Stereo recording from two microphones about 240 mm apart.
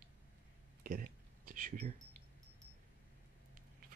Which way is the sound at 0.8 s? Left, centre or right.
Right.